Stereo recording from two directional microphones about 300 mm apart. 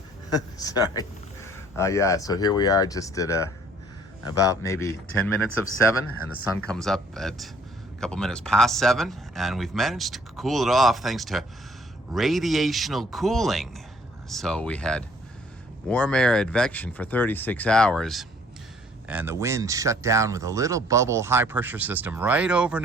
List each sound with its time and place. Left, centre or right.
0.6 s speech: centre
5.5 s speech: left
6.6 s speech: centre